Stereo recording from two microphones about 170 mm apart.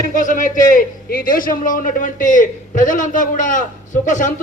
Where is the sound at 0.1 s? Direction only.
50° left (ahead or behind).